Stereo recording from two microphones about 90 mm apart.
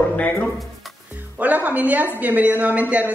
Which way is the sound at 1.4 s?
20° right (ahead or behind).